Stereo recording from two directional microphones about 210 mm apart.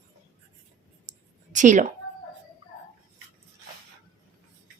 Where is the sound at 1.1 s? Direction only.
35° right (ahead or behind).